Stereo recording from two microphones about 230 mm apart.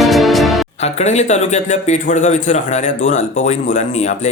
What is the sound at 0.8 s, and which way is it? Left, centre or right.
A man's voice, left.